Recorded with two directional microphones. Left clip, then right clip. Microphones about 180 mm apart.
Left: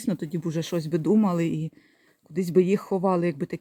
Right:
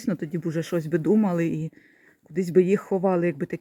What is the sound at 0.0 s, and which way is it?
Speech, centre (ahead or behind).